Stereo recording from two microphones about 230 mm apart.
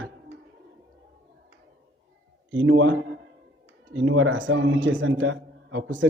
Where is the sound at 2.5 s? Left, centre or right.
Right.